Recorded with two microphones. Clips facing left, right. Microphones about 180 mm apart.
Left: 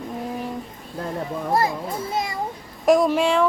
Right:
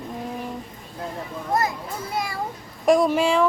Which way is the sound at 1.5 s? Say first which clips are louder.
Left 2 dB; 30° left (ahead or behind).